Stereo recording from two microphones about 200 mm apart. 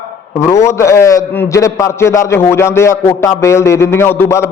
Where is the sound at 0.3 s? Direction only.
15° left (ahead or behind).